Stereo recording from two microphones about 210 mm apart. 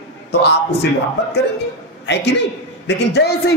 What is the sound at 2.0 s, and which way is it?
A man's voice, 55° left (ahead or behind).